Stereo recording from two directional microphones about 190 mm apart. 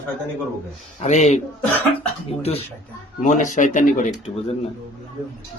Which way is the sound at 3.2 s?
40° left (ahead or behind).